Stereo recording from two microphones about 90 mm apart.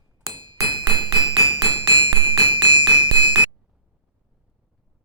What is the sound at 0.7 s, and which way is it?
Hammer, 50° right (ahead or behind).